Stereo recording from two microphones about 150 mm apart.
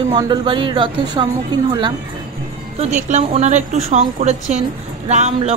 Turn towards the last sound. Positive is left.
turn(degrees=-50)  # may be behind; listen again after turning